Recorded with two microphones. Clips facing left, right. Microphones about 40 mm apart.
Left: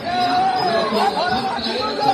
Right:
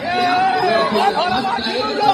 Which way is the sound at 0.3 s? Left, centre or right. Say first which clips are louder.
Right 3 dB; right.